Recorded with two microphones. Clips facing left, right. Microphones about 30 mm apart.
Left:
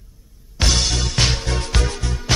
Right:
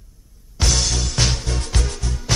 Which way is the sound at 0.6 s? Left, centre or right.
Left.